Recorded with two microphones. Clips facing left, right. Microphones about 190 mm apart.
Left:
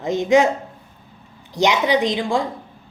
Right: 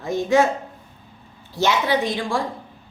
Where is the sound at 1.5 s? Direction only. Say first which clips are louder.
Left 3 dB; 15° left (ahead or behind).